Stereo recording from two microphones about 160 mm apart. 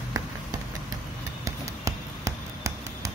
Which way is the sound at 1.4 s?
20° right (ahead or behind).